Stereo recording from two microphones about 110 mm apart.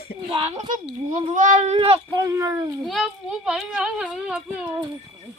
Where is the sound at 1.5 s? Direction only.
90° right.